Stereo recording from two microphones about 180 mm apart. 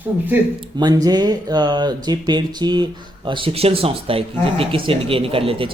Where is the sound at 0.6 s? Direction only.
25° right (ahead or behind).